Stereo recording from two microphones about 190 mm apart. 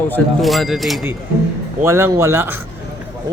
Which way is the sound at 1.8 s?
15° right (ahead or behind).